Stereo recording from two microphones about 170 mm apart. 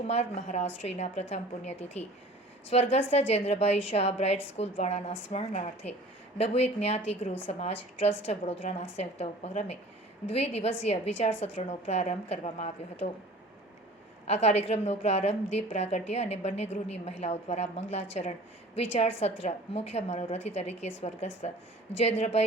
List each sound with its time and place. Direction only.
0.1 s a woman's voice: 40° left (ahead or behind)
14.3 s a woman's voice: 40° left (ahead or behind)